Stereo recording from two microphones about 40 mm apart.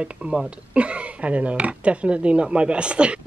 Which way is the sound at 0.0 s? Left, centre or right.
Right.